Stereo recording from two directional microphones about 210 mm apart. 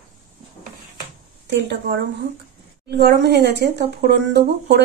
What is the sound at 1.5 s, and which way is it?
Speech, 55° right (ahead or behind).